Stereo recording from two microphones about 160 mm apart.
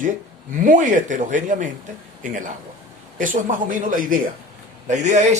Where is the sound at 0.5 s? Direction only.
55° right (ahead or behind).